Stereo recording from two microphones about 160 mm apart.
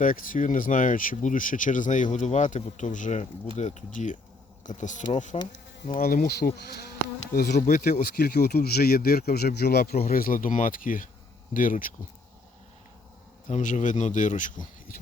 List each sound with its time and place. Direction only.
0.0 s speech: 60° left (ahead or behind)
5.9 s speech: 65° left (ahead or behind); by 7.9 s 85° left
8.0 s speech: 75° left (ahead or behind); by 11.9 s 60° left (ahead or behind)
13.5 s speech: 50° left (ahead or behind)